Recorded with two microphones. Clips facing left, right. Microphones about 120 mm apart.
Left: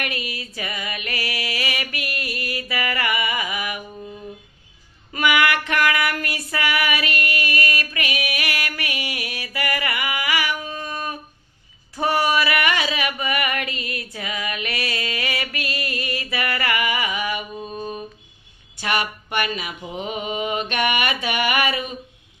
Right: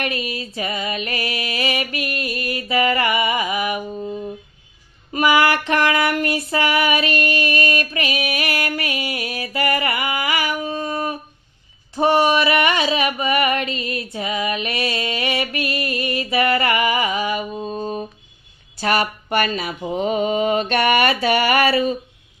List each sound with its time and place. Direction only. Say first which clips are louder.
0.0 s music: right 5 dB; 30° right (ahead or behind)
5.1 s a sound: right 3 dB; 30° right (ahead or behind)
18.8 s mantra: right 4 dB; 40° right (ahead or behind)